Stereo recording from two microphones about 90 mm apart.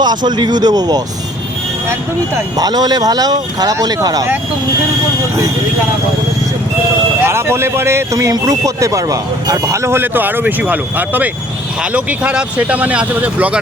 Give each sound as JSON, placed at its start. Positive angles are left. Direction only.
{"t": 0.0, "sound": "speech", "side_deg": -55}
{"t": 2.6, "sound": "speech", "side_deg": -50}
{"t": 7.2, "sound": "speech", "side_deg": -30}